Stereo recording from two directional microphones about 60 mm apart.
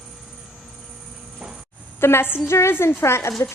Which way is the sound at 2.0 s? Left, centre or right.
Left.